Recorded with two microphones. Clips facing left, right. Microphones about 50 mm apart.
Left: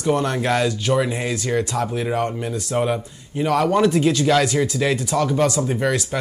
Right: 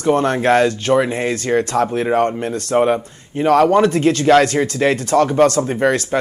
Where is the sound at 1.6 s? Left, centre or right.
Right.